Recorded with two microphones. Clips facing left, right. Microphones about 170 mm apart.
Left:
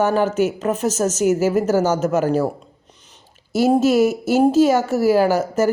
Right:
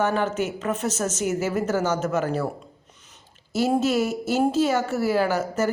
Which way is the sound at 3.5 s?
40° left (ahead or behind).